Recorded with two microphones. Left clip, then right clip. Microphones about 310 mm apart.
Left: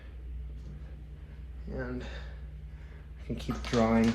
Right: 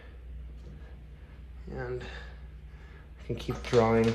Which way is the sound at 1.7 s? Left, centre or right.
Right.